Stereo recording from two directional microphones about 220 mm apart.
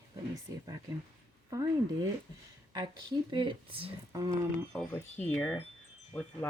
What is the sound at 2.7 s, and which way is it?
Speech, 20° right (ahead or behind).